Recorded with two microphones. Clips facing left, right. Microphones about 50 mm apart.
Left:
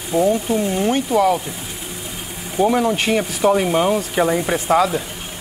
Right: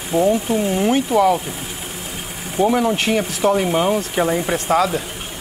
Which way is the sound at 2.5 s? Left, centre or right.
Centre.